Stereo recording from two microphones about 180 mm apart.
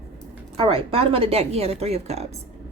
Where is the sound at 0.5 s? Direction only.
30° right (ahead or behind).